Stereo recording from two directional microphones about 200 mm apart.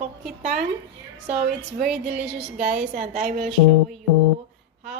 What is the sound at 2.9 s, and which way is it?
Speech, 40° right (ahead or behind).